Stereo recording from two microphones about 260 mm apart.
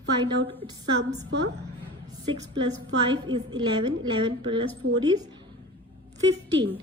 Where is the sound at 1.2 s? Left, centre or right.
Right.